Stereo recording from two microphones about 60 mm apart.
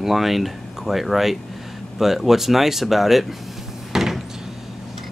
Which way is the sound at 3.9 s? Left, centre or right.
Centre.